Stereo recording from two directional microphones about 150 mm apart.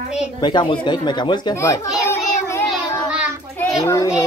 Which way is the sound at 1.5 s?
20° left (ahead or behind).